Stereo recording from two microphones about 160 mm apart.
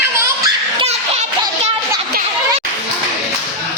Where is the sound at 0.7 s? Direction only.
40° right (ahead or behind).